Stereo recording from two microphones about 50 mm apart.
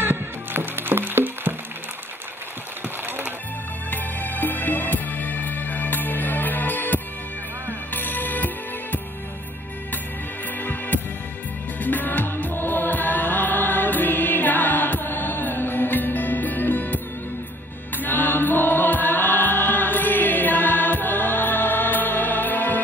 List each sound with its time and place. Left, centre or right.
0.0 s music: right
3.9 s music: left
10.6 s hum: left
11.8 s music: left
17.9 s chant: left